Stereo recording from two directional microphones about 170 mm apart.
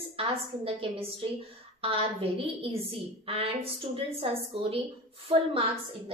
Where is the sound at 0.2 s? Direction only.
35° right (ahead or behind).